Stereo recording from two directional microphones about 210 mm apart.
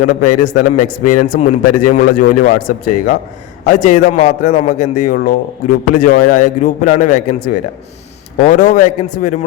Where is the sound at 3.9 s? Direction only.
35° left (ahead or behind).